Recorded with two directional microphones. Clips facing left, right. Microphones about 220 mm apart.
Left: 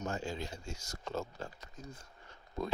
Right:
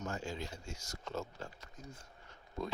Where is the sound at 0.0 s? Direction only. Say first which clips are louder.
Left 2 dB; 30° left (ahead or behind).